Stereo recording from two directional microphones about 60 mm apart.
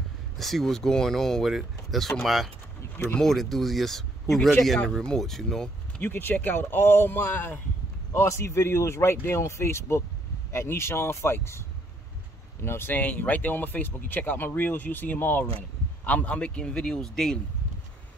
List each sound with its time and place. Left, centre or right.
0.4 s a man's voice: centre
6.0 s speech: left
8.1 s speech: left
12.6 s a man's voice: left; by 17.4 s centre